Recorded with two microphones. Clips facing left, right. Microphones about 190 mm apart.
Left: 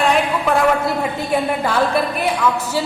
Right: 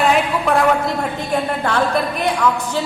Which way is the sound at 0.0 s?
Centre (ahead or behind).